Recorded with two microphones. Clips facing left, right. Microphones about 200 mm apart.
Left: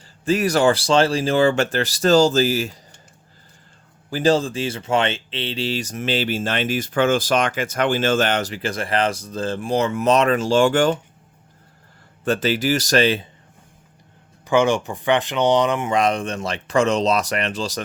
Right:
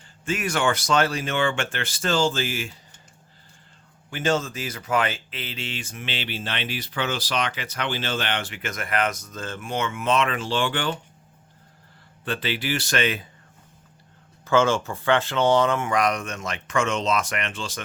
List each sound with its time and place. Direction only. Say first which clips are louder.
0.3 s speech: left 7 dB; 35° left (ahead or behind)
4.1 s speech: left 6 dB; 35° left (ahead or behind)
12.2 s speech: left 8 dB; 45° left (ahead or behind)
14.4 s speech: left 3 dB; 15° left (ahead or behind); by 17.7 s 40° left (ahead or behind)